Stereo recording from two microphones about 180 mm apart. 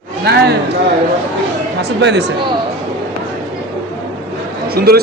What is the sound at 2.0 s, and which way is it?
Speech, 75° right (ahead or behind).